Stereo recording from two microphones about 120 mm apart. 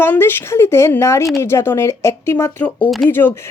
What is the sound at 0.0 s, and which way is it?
A woman's voice, 20° left (ahead or behind).